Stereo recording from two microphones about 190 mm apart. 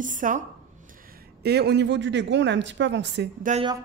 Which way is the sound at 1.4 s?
60° right (ahead or behind).